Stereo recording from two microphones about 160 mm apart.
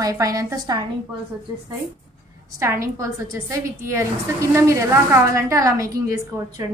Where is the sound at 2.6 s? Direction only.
20° right (ahead or behind).